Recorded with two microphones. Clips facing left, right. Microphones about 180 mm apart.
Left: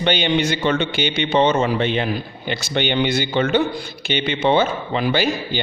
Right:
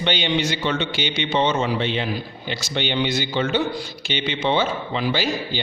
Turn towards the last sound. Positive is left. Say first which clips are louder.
# left 3 dB
turn(degrees=55)  # may be behind; listen again after turning